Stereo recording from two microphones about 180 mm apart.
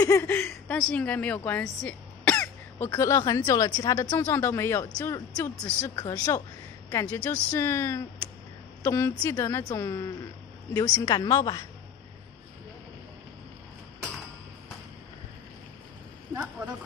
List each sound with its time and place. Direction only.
0.0 s a woman's voice: 15° left (ahead or behind)